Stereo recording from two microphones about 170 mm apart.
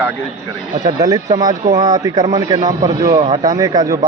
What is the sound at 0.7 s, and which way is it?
Speech, 55° right (ahead or behind).